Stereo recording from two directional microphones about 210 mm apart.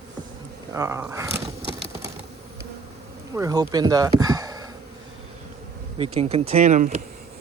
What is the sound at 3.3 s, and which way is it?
Speech, 15° right (ahead or behind).